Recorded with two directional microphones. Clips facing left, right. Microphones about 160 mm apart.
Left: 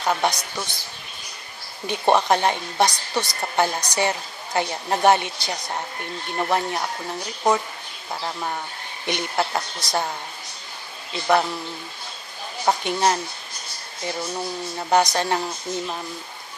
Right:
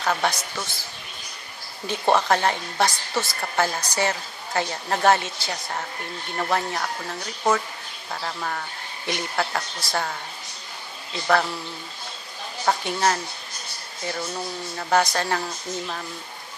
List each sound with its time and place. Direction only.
0.0 s a woman's voice: 15° left (ahead or behind)
1.9 s a woman's voice: 15° left (ahead or behind)
12.6 s speech: 20° left (ahead or behind)